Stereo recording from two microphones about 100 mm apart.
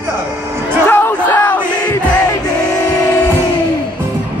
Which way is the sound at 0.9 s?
20° left (ahead or behind).